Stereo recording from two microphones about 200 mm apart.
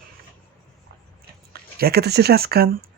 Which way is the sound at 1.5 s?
50° right (ahead or behind).